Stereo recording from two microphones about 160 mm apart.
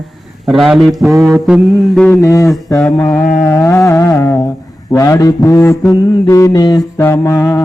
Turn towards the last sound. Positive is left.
turn(degrees=20)  # may be behind; listen again after turning